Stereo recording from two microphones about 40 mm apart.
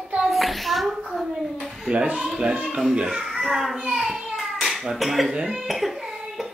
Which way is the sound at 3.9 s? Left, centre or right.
Centre.